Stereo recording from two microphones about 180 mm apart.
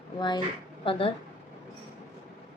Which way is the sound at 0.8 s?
30° left (ahead or behind).